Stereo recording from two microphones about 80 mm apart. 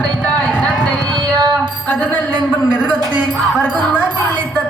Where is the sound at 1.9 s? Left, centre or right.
Left.